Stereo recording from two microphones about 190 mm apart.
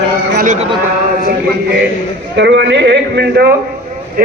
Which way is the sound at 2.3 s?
70° right (ahead or behind).